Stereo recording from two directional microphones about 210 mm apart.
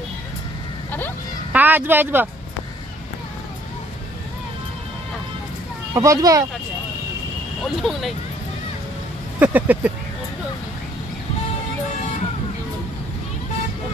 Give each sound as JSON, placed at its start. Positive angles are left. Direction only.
{"t": 1.5, "sound": "speech", "side_deg": -10}
{"t": 5.9, "sound": "speech", "side_deg": -15}
{"t": 7.6, "sound": "speech", "side_deg": 0}
{"t": 9.4, "sound": "speech", "side_deg": -10}